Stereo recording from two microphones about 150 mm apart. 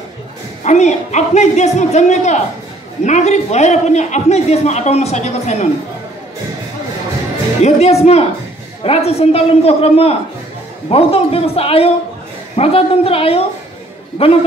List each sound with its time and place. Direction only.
0.7 s a man's voice: 50° left (ahead or behind)
7.6 s a man's voice: 45° left (ahead or behind)